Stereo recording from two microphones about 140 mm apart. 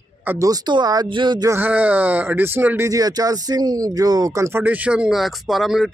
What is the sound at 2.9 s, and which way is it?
Speech, 25° right (ahead or behind).